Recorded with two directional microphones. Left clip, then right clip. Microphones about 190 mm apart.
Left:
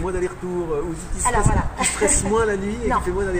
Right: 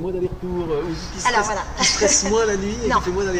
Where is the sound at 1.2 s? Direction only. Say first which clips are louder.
Right 2 dB; 10° left (ahead or behind).